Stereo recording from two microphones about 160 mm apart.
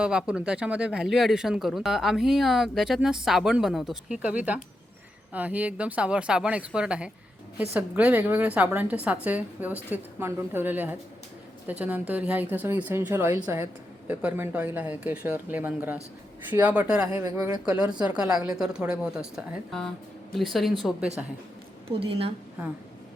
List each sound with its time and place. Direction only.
0.0 s a woman's voice: 5° right (ahead or behind)
17.1 s speech: 20° right (ahead or behind)
17.8 s speech: 5° right (ahead or behind)
21.8 s a woman's voice: 35° right (ahead or behind)